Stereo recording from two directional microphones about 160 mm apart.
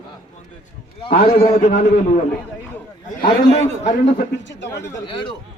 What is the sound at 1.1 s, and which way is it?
Speech, 70° left (ahead or behind).